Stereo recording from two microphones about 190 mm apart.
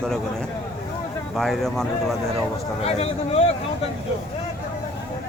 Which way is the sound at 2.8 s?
35° left (ahead or behind).